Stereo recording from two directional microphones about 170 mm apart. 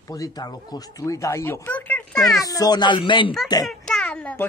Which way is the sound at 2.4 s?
20° left (ahead or behind).